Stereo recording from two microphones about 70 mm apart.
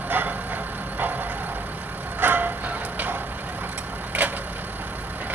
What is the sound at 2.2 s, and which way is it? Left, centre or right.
Music, right.